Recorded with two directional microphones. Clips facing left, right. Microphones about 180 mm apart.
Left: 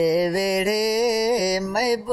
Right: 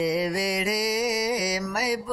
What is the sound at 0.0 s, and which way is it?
Music, 40° left (ahead or behind).